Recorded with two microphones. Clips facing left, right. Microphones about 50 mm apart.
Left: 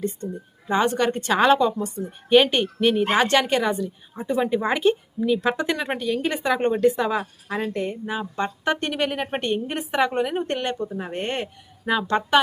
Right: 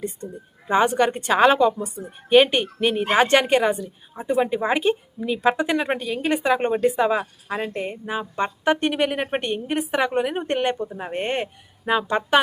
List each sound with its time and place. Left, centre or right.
0.2 s a woman's voice: centre
1.3 s a woman's voice: centre
10.2 s a woman's voice: centre
10.9 s a woman's voice: centre